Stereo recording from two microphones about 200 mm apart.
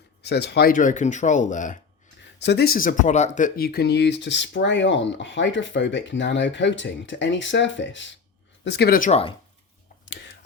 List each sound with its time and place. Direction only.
0.2 s speech: 55° left (ahead or behind); by 1.8 s 40° left (ahead or behind)
2.4 s speech: 55° left (ahead or behind)